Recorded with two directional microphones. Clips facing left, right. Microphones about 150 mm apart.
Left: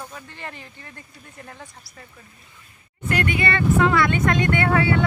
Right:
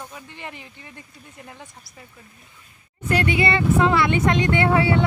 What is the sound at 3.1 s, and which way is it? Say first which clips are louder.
Speech: right 2 dB; 30° right (ahead or behind).